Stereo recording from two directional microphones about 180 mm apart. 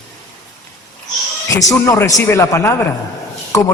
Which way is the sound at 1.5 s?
20° left (ahead or behind).